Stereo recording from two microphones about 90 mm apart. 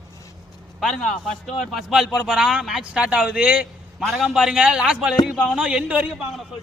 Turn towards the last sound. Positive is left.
turn(degrees=-15)  # may be behind; listen again after turning